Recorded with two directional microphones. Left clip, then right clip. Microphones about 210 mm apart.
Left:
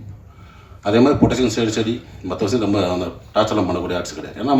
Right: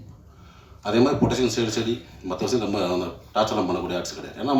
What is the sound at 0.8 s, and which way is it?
Speech, 55° right (ahead or behind).